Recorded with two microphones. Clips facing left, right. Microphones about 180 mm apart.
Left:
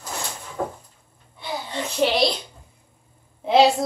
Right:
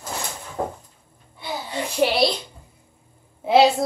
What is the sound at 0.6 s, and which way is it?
Cupboard open or close, 25° right (ahead or behind).